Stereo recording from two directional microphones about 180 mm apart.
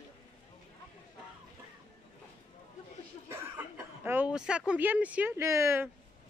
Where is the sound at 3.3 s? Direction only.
15° right (ahead or behind).